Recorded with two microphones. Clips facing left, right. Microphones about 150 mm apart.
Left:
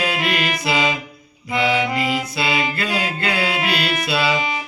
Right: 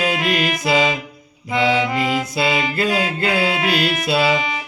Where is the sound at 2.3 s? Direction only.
45° right (ahead or behind).